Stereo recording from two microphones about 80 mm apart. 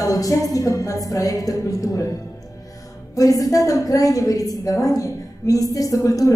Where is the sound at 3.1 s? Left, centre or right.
Left.